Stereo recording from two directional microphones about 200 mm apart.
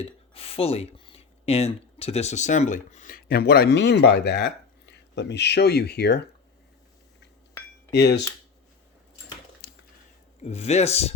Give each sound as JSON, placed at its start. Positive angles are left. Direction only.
{"t": 0.0, "sound": "speech", "side_deg": 30}
{"t": 7.9, "sound": "speech", "side_deg": 55}
{"t": 9.6, "sound": "a sound", "side_deg": 60}
{"t": 10.4, "sound": "speech", "side_deg": 30}